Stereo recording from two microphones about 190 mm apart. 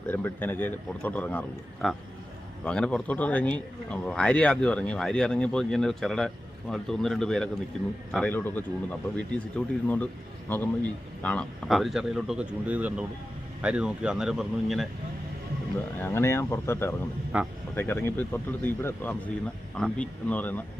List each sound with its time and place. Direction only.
0.1 s a man's voice: 10° left (ahead or behind)
11.2 s a man's voice: 5° left (ahead or behind)
16.0 s a man's voice: 10° left (ahead or behind)
17.3 s a man's voice: 5° right (ahead or behind)
17.7 s a man's voice: 10° left (ahead or behind)